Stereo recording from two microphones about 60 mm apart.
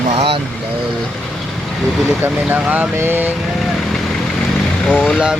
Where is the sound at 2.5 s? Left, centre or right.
Right.